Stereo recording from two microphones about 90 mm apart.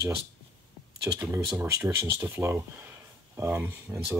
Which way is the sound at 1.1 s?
25° right (ahead or behind).